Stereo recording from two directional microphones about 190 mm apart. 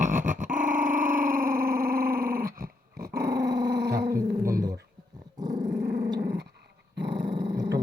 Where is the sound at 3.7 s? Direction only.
60° right (ahead or behind).